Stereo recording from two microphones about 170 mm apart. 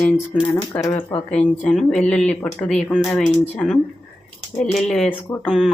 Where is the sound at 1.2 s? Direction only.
5° left (ahead or behind).